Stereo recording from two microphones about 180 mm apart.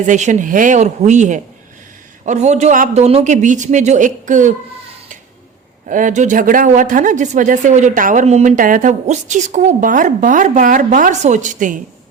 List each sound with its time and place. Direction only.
0.0 s a woman's voice: 45° right (ahead or behind)
5.9 s a woman's voice: 45° right (ahead or behind)